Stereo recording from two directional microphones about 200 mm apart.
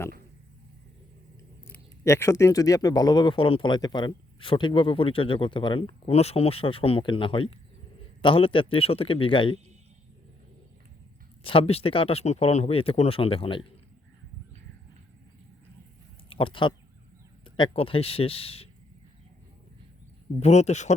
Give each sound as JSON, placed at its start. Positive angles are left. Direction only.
{"t": 1.6, "sound": "speech", "side_deg": 15}
{"t": 11.4, "sound": "speech", "side_deg": 30}
{"t": 16.3, "sound": "speech", "side_deg": 25}
{"t": 20.4, "sound": "speech", "side_deg": 35}